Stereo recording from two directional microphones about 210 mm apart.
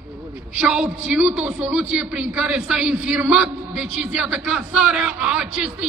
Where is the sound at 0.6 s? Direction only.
5° right (ahead or behind).